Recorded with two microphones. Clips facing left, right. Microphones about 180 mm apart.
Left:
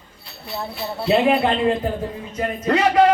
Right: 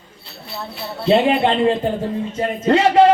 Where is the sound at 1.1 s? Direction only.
25° right (ahead or behind).